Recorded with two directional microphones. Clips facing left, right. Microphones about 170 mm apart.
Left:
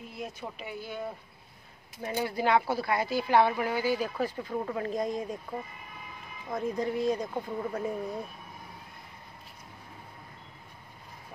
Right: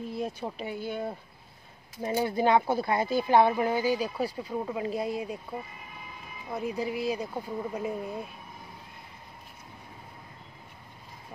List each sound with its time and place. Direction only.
0.1 s speech: 30° right (ahead or behind)
2.0 s speech: 25° right (ahead or behind); by 8.2 s 10° right (ahead or behind)